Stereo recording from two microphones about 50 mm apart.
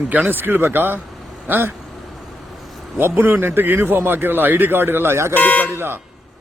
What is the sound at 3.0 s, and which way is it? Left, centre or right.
A man's voice, right.